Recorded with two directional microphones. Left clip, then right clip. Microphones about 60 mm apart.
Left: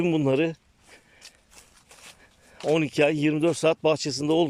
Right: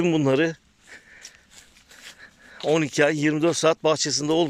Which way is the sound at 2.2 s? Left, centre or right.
Centre.